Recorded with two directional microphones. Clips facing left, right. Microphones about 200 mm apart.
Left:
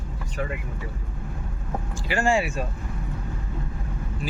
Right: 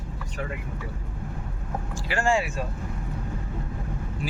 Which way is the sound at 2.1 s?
10° left (ahead or behind).